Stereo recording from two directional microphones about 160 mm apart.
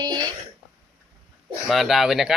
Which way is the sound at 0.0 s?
25° right (ahead or behind).